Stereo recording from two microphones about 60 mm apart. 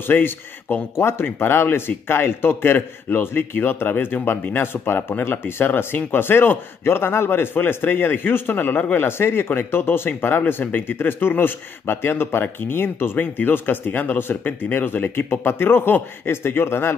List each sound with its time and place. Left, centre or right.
0.0 s speech: left
8.9 s speech: left